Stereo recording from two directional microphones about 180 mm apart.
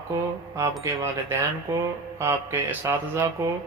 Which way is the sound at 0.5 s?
15° right (ahead or behind).